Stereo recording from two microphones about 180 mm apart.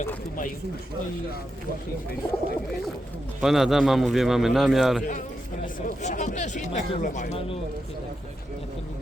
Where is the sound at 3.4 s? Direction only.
Centre (ahead or behind).